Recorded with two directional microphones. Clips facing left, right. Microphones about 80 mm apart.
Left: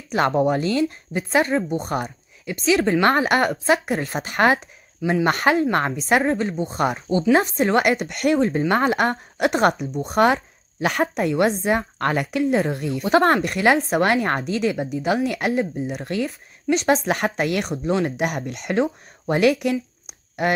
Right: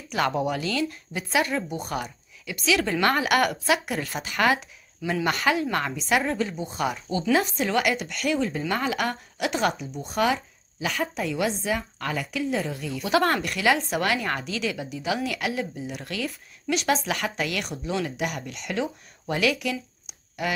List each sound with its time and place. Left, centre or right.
0.1 s speech: left
13.0 s speech: left
16.0 s speech: left